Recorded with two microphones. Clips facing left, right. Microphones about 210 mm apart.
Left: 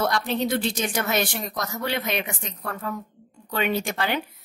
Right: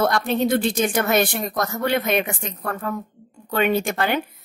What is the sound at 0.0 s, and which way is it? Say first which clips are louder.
Speech: right 4 dB; 50° right (ahead or behind).